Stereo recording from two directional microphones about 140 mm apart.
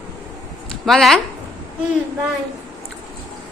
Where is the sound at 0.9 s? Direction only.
Centre (ahead or behind).